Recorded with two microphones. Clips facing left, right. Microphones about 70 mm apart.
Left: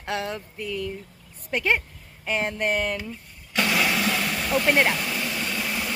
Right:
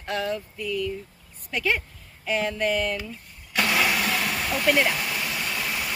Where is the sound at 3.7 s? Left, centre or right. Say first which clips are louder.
Even; centre.